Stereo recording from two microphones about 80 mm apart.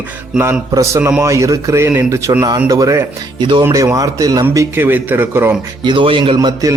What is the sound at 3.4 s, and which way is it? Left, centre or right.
Speech, right.